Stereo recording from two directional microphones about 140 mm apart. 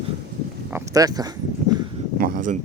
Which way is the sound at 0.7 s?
20° right (ahead or behind).